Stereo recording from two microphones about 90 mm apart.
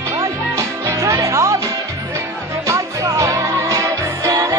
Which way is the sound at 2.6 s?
35° right (ahead or behind).